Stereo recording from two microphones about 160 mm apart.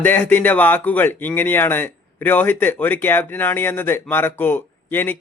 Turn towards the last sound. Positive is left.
turn(degrees=15)  # may be behind; listen again after turning